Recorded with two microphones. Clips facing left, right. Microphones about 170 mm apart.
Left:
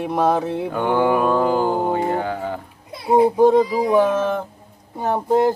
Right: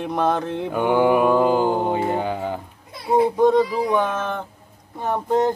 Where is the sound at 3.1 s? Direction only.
15° left (ahead or behind).